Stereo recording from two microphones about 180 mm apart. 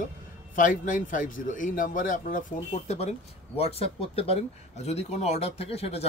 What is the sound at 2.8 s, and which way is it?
Speech, 35° left (ahead or behind).